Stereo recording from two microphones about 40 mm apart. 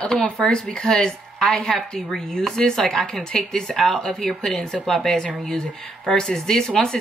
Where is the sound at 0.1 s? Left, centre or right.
Centre.